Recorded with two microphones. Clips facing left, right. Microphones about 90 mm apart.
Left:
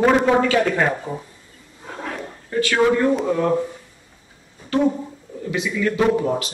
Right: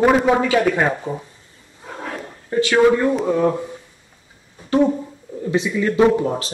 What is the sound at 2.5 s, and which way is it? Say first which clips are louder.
Speech: right 3 dB; 20° right (ahead or behind).